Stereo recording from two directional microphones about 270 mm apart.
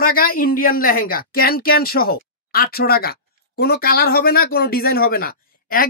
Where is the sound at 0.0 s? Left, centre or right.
Left.